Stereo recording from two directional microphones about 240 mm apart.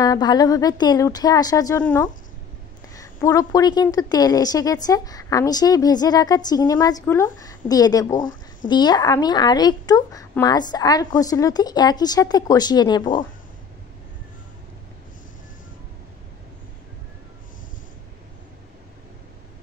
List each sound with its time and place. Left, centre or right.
0.0 s a woman's voice: centre